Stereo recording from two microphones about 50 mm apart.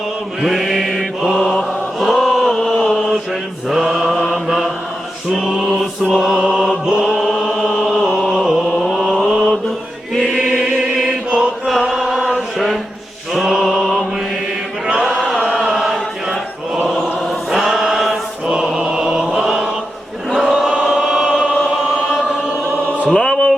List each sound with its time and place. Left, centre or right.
0.4 s mantra: centre
1.5 s chant: centre
3.7 s mantra: centre
6.3 s chant: centre
8.3 s a sound: centre
8.8 s chant: centre
10.2 s choir: centre
10.6 s chant: centre
11.7 s chant: centre
13.3 s mantra: centre
14.9 s chant: centre
20.8 s choir: centre
23.1 s music: centre